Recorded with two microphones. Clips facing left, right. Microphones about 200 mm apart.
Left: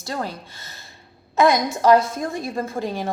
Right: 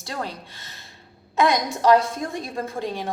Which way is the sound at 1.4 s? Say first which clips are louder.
Left 3 dB; 5° left (ahead or behind).